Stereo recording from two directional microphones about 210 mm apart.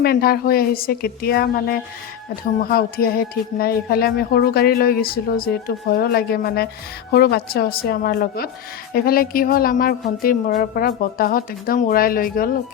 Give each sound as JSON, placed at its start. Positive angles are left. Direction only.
{"t": 0.0, "sound": "speech", "side_deg": 45}